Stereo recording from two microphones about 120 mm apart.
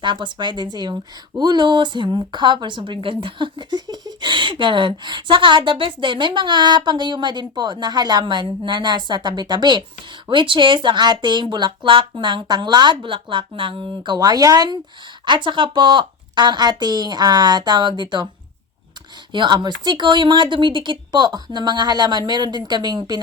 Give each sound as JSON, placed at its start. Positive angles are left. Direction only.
{"t": 0.0, "sound": "a woman's voice", "side_deg": -40}
{"t": 19.3, "sound": "a woman's voice", "side_deg": -40}